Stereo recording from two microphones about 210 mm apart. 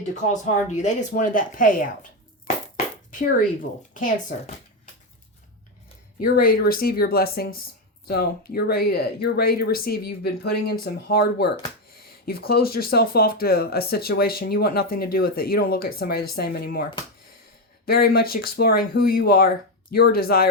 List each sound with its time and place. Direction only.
0.7 s a woman's voice: 35° left (ahead or behind)
3.1 s a woman's voice: 40° left (ahead or behind)
6.2 s speech: 45° left (ahead or behind)
17.8 s speech: 45° left (ahead or behind)